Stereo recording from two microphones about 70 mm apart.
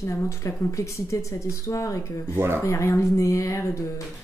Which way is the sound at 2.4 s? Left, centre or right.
Right.